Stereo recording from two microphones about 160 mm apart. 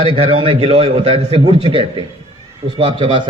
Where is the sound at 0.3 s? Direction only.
35° right (ahead or behind).